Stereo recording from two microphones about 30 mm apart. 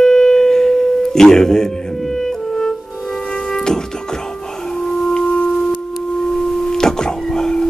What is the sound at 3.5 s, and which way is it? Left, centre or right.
Music, left.